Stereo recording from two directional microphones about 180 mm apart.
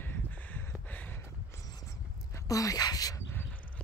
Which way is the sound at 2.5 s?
20° left (ahead or behind).